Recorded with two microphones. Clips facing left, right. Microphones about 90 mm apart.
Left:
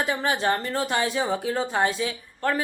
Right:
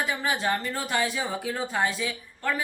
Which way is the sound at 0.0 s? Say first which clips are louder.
Left 3 dB; 35° left (ahead or behind).